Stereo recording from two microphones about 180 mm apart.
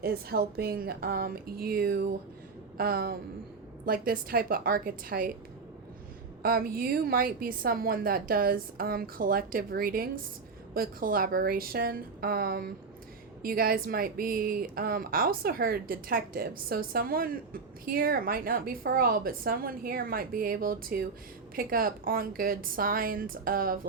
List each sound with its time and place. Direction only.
0.0 s a woman's voice: 60° right (ahead or behind)
6.4 s a woman's voice: 55° right (ahead or behind)